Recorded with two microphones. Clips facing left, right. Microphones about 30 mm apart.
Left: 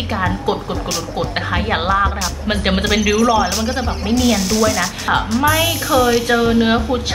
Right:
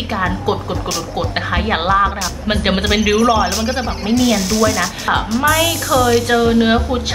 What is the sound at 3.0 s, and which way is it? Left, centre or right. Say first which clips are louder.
A woman's voice: right 1 dB; centre.